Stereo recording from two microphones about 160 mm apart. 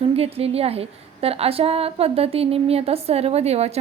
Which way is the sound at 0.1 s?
40° right (ahead or behind).